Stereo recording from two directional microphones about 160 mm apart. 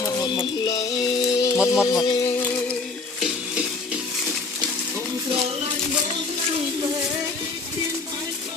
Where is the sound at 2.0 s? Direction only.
25° left (ahead or behind).